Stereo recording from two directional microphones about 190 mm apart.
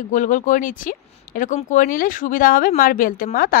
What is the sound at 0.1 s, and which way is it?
Speech, 45° left (ahead or behind).